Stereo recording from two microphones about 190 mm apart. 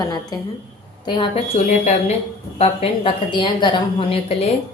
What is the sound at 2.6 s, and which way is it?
A woman's voice, 30° left (ahead or behind).